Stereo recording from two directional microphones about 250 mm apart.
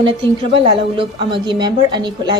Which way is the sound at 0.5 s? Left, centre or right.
Right.